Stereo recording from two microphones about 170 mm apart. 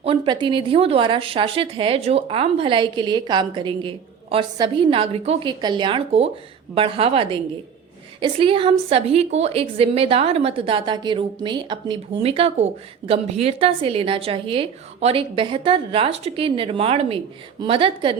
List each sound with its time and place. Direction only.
0.0 s speech: 30° right (ahead or behind)